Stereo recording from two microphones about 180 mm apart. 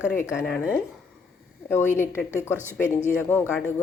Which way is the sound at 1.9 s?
15° left (ahead or behind).